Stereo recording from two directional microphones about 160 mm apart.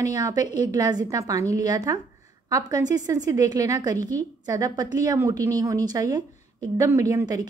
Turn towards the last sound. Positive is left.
turn(degrees=-25)  # may be behind; listen again after turning